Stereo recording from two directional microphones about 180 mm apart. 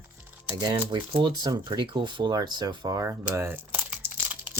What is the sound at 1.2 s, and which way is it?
Speech, 25° right (ahead or behind).